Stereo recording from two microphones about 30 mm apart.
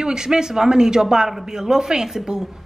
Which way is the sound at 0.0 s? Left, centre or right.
Right.